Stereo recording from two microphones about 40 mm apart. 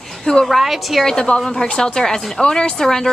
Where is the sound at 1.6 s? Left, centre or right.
Centre.